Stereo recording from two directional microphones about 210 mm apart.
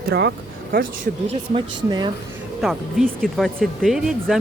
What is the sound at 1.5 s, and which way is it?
Speech, 20° right (ahead or behind).